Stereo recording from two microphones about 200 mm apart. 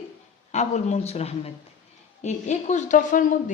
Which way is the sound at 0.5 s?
35° left (ahead or behind).